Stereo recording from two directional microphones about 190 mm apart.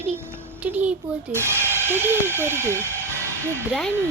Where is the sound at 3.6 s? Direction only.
5° left (ahead or behind).